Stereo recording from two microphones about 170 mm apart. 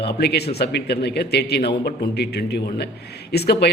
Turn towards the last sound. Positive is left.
turn(degrees=70)  # may be behind; listen again after turning